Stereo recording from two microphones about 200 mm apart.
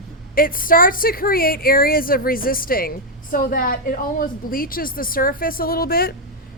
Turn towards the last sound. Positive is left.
turn(degrees=50)  # may be behind; listen again after turning